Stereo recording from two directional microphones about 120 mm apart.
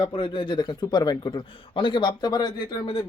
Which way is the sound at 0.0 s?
45° left (ahead or behind).